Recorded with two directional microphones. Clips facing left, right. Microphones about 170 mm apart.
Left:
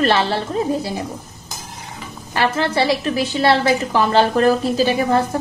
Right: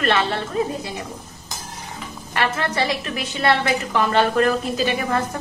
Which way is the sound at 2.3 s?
30° left (ahead or behind).